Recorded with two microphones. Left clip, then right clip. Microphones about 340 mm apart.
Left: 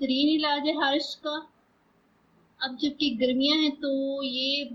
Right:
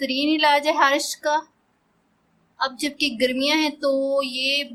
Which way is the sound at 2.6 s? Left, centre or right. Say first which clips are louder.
Right 5 dB; centre.